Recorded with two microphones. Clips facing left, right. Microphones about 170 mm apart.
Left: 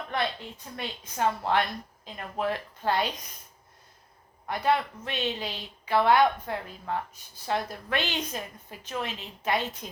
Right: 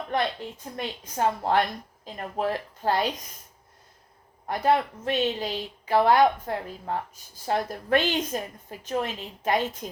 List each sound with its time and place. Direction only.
0.1 s speech: 45° right (ahead or behind)
4.4 s speech: 40° right (ahead or behind)